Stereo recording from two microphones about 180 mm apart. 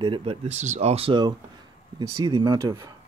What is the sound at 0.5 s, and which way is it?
Speech, 40° right (ahead or behind).